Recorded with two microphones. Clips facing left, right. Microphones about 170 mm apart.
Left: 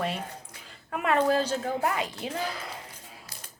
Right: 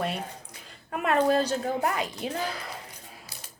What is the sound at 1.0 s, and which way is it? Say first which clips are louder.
Speech: right 1 dB; 40° right (ahead or behind).